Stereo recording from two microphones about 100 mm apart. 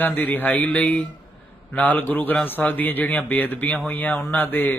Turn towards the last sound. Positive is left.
turn(degrees=15)  # may be behind; listen again after turning